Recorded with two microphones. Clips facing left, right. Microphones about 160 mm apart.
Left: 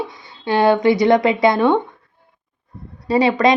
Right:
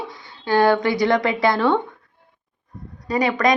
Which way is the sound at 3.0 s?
25° left (ahead or behind).